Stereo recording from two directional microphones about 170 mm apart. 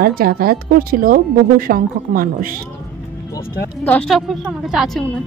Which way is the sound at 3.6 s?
10° left (ahead or behind).